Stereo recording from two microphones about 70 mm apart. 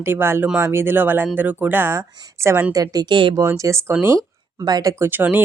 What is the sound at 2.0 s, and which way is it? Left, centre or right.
Speech, right.